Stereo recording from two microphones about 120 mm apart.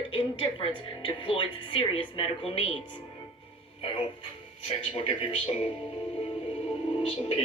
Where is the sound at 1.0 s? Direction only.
45° left (ahead or behind).